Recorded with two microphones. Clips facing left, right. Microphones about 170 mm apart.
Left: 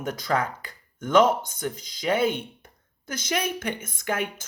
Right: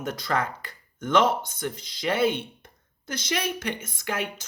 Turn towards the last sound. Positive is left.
turn(degrees=50)  # may be behind; listen again after turning